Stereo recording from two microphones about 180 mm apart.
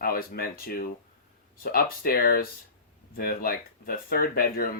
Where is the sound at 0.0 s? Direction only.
55° left (ahead or behind).